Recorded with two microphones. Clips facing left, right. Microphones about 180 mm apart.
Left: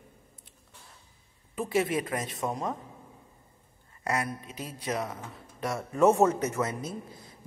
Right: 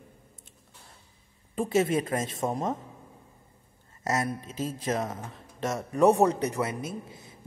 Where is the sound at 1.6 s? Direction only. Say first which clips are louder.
Right 3 dB; 25° right (ahead or behind).